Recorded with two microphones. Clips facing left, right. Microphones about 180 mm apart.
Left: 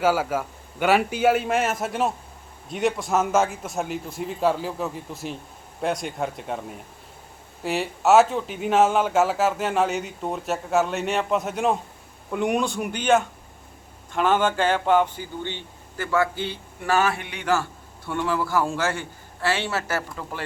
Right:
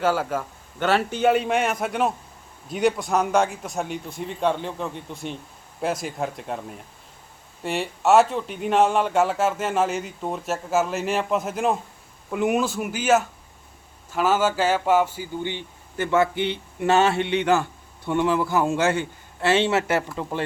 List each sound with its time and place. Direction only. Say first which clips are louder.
0.0 s speech: left 1 dB; 10° left (ahead or behind); by 20.4 s 20° right (ahead or behind)